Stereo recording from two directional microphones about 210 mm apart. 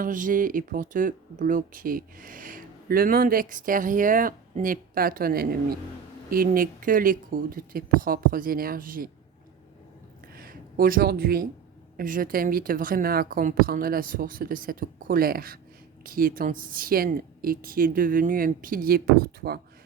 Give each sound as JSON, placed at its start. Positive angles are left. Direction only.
{"t": 0.0, "sound": "a woman's voice", "side_deg": -40}
{"t": 10.3, "sound": "a sound", "side_deg": -45}
{"t": 11.9, "sound": "a woman's voice", "side_deg": -40}